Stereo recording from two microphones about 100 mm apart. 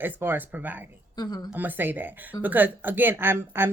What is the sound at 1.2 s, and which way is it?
Speech, 40° left (ahead or behind).